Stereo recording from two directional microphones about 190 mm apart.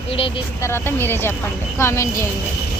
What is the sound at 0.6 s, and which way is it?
Speech, 10° left (ahead or behind).